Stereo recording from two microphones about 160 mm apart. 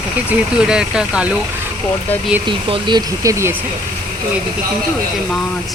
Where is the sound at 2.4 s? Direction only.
30° right (ahead or behind).